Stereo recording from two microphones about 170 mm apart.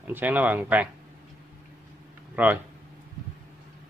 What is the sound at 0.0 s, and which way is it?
Speech, 10° right (ahead or behind).